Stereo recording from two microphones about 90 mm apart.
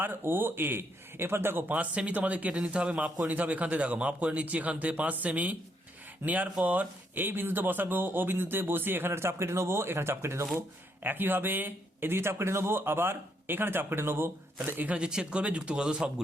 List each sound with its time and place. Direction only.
0.0 s a man's voice: 25° right (ahead or behind)